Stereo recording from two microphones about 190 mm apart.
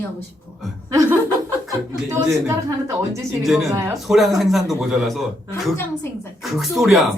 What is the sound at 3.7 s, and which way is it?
Speech, 15° right (ahead or behind).